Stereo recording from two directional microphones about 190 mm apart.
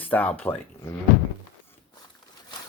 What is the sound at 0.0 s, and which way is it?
Speech, 10° left (ahead or behind).